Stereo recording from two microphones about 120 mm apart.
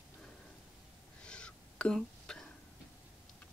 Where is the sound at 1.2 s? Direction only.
10° left (ahead or behind).